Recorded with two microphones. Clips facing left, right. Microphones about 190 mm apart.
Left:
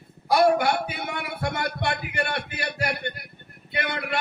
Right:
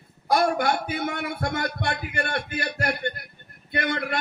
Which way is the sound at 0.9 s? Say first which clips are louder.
Right 4 dB; 50° right (ahead or behind).